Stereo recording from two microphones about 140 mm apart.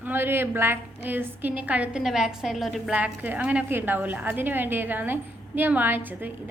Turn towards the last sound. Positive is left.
turn(degrees=-15)  # may be behind; listen again after turning